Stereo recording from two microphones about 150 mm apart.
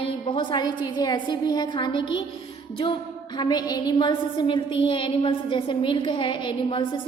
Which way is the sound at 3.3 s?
30° left (ahead or behind).